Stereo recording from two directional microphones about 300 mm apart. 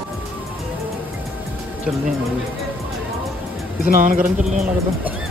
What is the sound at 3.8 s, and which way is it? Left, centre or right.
Speech, right.